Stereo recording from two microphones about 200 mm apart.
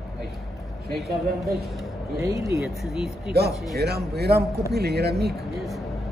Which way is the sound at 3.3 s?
50° right (ahead or behind).